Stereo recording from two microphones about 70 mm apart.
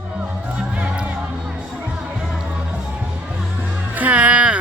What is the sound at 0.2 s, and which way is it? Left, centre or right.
Music, centre.